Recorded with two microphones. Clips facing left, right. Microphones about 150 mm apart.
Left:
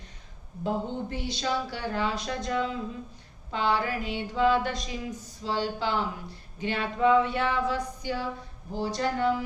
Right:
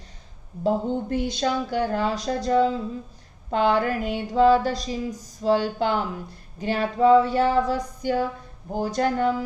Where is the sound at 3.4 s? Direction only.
50° right (ahead or behind).